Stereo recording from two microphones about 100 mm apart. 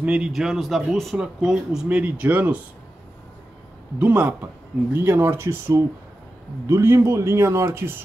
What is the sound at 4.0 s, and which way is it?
Speech, 20° right (ahead or behind).